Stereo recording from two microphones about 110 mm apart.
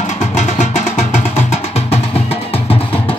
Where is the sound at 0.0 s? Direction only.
90° left.